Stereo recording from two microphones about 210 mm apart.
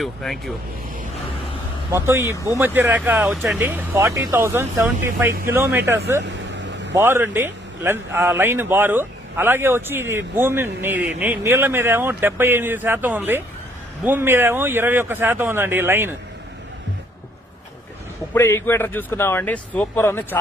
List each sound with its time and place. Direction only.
0.0 s speech: centre (ahead or behind)
1.9 s a man's voice: 10° right (ahead or behind)
6.2 s vehicle: 55° right (ahead or behind)
6.9 s a man's voice: 10° right (ahead or behind)
18.3 s speech: 10° left (ahead or behind)